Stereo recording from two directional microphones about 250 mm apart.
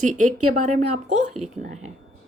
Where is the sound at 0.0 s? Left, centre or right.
Right.